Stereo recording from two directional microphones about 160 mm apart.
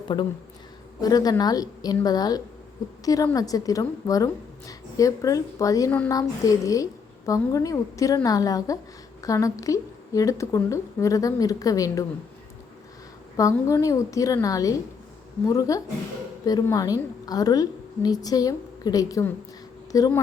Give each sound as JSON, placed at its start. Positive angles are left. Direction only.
{"t": 0.1, "sound": "a woman's voice", "side_deg": 25}
{"t": 13.3, "sound": "a woman's voice", "side_deg": 20}